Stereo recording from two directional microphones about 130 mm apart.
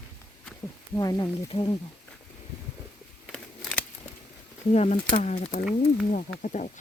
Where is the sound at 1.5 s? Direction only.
50° left (ahead or behind).